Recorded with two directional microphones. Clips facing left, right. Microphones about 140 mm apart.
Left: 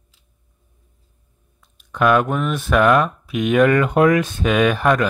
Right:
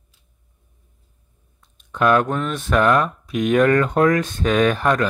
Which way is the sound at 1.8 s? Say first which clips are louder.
Left 1 dB; 5° left (ahead or behind).